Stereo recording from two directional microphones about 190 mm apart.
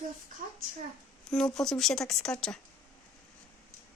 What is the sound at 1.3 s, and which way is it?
Speech, 5° left (ahead or behind).